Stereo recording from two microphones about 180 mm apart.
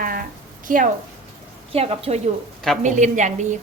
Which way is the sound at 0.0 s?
50° right (ahead or behind).